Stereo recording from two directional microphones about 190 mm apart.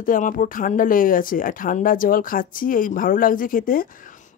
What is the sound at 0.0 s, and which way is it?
Speech, 45° left (ahead or behind).